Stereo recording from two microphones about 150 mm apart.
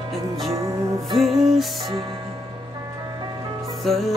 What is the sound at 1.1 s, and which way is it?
Music, centre (ahead or behind).